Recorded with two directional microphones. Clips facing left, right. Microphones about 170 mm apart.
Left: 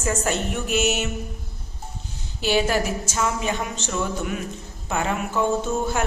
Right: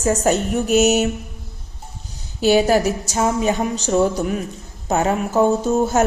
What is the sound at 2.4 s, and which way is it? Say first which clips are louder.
Speech: right 7 dB; 40° right (ahead or behind).